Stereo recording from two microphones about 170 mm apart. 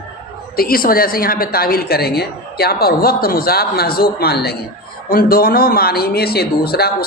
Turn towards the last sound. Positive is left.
turn(degrees=65)  # may be behind; listen again after turning